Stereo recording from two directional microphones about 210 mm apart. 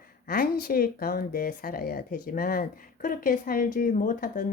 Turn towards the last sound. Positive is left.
turn(degrees=40)  # may be behind; listen again after turning